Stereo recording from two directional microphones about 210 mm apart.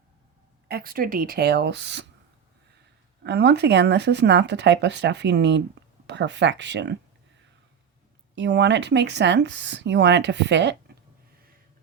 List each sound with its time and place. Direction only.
0.7 s speech: 45° right (ahead or behind)
3.2 s speech: 55° right (ahead or behind)
8.4 s speech: 55° right (ahead or behind)